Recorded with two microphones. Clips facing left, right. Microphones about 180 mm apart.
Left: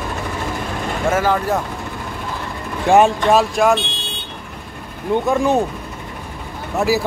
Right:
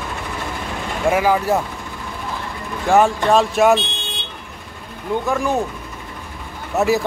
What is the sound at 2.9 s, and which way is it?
Speech, 15° left (ahead or behind).